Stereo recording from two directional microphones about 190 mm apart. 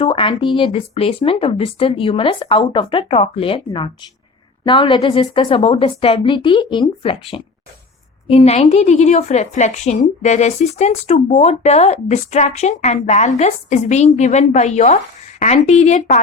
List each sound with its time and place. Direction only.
0.0 s speech: 25° left (ahead or behind)